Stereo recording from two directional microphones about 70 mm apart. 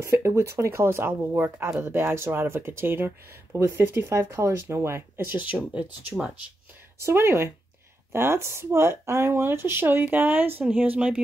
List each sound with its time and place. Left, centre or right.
0.0 s speech: right
7.0 s speech: right; by 11.2 s centre